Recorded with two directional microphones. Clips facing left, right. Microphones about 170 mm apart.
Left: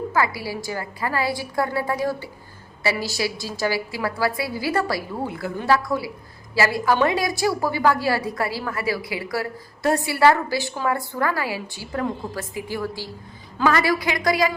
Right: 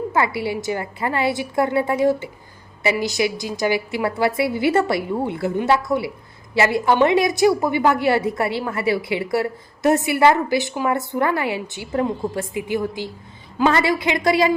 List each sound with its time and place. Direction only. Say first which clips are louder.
0.1 s a woman's voice: right 3 dB; 25° right (ahead or behind)